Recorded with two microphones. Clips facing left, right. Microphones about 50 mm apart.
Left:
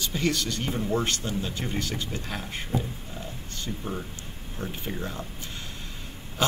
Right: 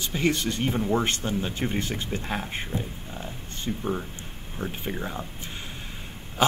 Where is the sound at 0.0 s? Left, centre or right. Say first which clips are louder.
Right 2 dB; centre.